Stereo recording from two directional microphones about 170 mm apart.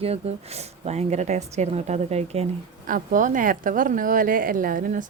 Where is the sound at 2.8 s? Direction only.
50° right (ahead or behind).